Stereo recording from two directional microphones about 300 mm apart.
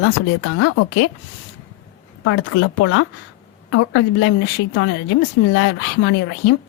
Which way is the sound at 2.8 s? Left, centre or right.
Left.